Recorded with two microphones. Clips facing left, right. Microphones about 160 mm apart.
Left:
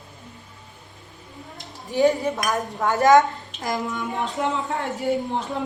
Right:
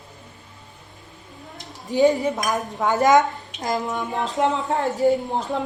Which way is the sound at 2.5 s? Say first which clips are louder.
Even; centre (ahead or behind).